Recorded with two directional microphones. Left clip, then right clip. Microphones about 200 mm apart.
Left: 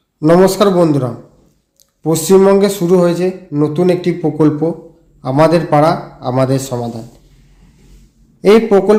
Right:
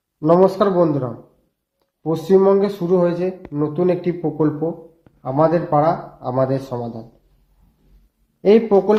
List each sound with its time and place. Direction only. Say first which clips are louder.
0.2 s a man's voice: left 5 dB; 10° left (ahead or behind)
8.4 s speech: left 5 dB; 5° left (ahead or behind)